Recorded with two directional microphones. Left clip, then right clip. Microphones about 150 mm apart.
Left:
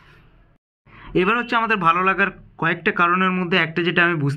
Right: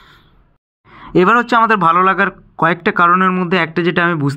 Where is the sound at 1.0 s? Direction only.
45° right (ahead or behind).